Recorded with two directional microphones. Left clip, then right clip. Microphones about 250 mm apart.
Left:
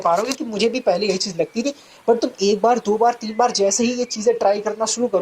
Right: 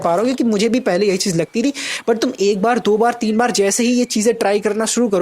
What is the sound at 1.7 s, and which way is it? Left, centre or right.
Speech, right.